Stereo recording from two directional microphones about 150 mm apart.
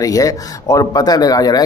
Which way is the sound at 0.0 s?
25° left (ahead or behind).